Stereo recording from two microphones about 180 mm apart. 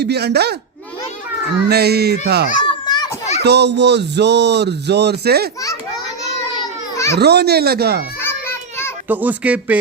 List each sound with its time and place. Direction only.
0.0 s speech: 65° right (ahead or behind)
1.7 s speech: 65° right (ahead or behind)
2.6 s children playing: 25° left (ahead or behind)
3.4 s speech: 70° right (ahead or behind)
6.6 s baby cry: 15° left (ahead or behind)
7.2 s speech: 65° right (ahead or behind)
8.2 s children playing: 15° left (ahead or behind)
9.0 s speech: 10° right (ahead or behind)